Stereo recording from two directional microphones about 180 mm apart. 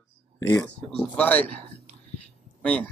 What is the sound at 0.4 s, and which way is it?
Speech, 15° left (ahead or behind).